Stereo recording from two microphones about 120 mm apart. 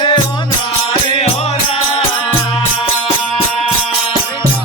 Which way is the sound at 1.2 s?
60° left (ahead or behind).